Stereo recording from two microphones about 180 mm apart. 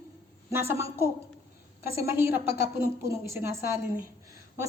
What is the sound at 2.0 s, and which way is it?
Speech, 15° right (ahead or behind).